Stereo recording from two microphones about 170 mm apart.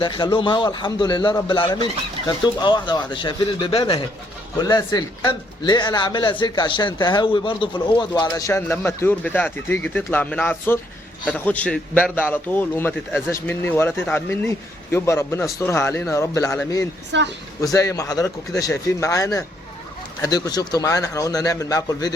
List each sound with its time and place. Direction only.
0.0 s a man's voice: 25° left (ahead or behind)
17.1 s a woman's voice: 90° right
17.6 s a man's voice: 20° left (ahead or behind)